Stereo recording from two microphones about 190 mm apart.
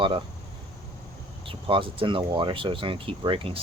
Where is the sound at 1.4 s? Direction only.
25° right (ahead or behind).